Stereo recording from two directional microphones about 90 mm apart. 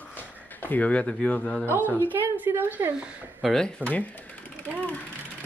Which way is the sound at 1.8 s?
25° left (ahead or behind).